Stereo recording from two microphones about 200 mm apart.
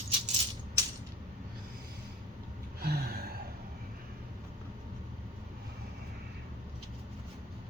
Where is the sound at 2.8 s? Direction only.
50° right (ahead or behind).